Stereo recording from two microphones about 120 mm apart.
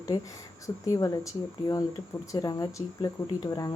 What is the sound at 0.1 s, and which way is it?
Speech, 35° left (ahead or behind).